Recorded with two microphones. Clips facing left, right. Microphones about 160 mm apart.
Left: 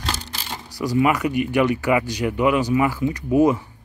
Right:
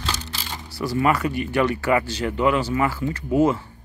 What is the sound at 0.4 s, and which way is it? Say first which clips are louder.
Speech: left 1 dB; 15° left (ahead or behind).